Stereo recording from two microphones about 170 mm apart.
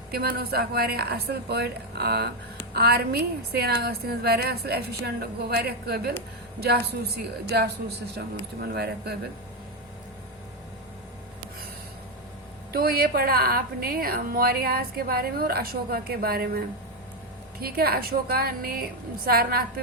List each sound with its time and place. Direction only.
0.1 s a woman's voice: 65° right (ahead or behind)
12.7 s a woman's voice: 65° right (ahead or behind)